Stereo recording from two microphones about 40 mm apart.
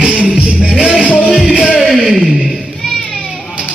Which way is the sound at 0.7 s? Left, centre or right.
Centre.